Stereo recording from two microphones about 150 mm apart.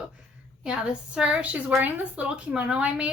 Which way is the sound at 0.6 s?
5° right (ahead or behind).